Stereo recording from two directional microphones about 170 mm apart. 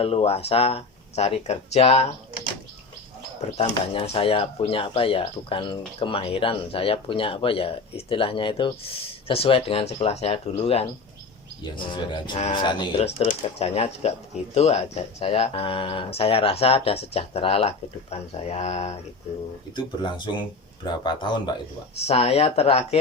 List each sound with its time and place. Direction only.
0.0 s speech: 35° left (ahead or behind)
3.6 s speech: 35° left (ahead or behind)
13.2 s speech: 40° left (ahead or behind)
19.7 s speech: 25° left (ahead or behind)